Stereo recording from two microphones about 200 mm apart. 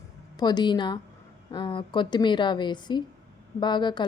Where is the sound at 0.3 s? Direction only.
20° left (ahead or behind).